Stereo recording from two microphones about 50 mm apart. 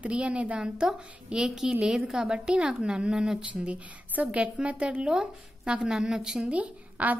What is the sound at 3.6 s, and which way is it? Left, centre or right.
A woman's voice, right.